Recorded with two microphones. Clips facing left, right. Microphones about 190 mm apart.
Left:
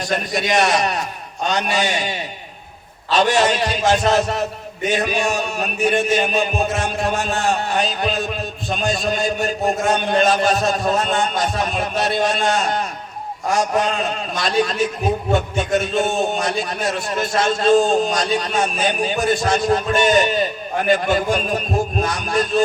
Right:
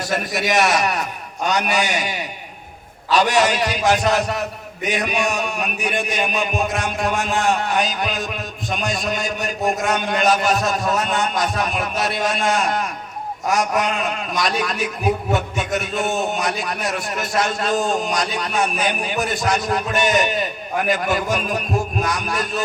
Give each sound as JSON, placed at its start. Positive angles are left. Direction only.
{"t": 0.1, "sound": "a man's voice", "side_deg": 25}